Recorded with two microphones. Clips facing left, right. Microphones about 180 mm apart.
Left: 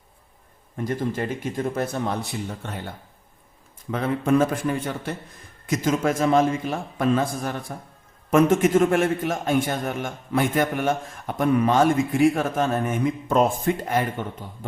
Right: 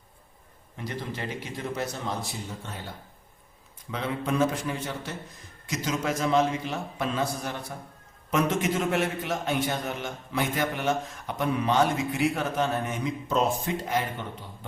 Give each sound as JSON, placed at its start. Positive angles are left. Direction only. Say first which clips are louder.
{"t": 0.8, "sound": "a man's voice", "louder": "left 8 dB", "side_deg": 50}
{"t": 3.9, "sound": "a man's voice", "louder": "left 7 dB", "side_deg": 50}